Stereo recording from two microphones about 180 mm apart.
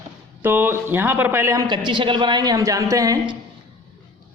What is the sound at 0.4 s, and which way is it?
A man's voice, 10° right (ahead or behind).